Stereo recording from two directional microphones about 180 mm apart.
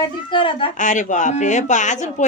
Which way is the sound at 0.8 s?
45° left (ahead or behind).